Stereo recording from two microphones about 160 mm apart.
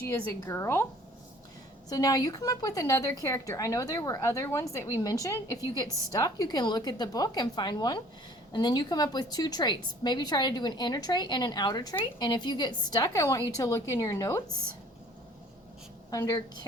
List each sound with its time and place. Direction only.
0.1 s speech: 20° left (ahead or behind)
1.9 s a woman's voice: 25° left (ahead or behind)
16.0 s a woman's voice: 25° left (ahead or behind)